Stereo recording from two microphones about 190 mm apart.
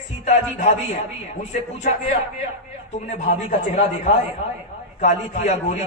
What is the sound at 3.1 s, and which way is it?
A man's voice, 35° left (ahead or behind).